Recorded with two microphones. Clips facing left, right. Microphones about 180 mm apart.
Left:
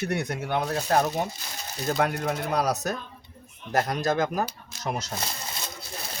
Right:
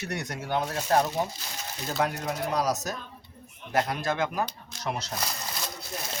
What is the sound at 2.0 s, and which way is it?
Speech, 60° left (ahead or behind).